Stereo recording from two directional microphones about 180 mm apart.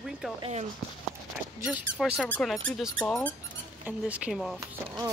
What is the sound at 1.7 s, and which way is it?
Speech, 5° right (ahead or behind).